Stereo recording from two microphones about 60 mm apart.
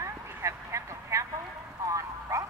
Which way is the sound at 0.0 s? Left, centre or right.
Right.